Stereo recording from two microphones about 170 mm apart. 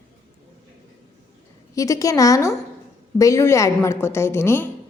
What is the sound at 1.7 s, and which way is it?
A woman's voice, 20° left (ahead or behind).